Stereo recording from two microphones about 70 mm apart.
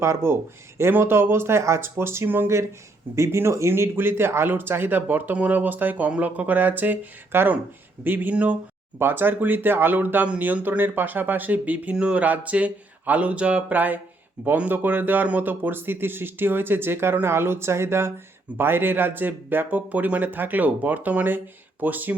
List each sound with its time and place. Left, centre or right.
0.0 s speech: right
3.2 s speech: right